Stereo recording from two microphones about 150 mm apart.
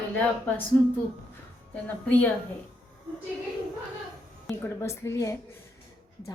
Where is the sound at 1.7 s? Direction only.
10° left (ahead or behind).